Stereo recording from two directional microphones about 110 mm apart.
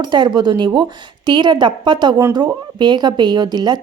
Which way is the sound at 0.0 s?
40° right (ahead or behind).